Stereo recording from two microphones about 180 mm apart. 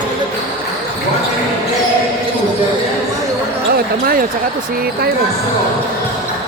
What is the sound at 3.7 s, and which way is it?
Speech, 55° right (ahead or behind).